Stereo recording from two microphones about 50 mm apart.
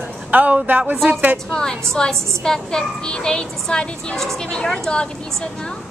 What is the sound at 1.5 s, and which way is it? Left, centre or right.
A child's voice, centre.